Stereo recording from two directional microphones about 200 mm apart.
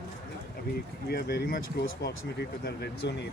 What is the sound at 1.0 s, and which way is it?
Speech, 55° left (ahead or behind).